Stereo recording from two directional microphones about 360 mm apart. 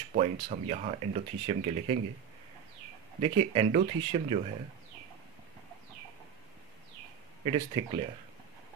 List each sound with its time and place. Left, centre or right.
0.1 s speech: centre
3.2 s speech: centre
7.4 s speech: centre